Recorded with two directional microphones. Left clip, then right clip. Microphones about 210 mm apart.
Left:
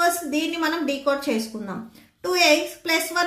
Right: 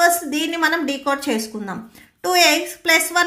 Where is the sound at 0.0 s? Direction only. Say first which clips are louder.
Right 5 dB; 55° right (ahead or behind).